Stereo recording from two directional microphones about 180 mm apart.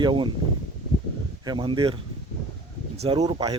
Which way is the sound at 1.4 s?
25° right (ahead or behind).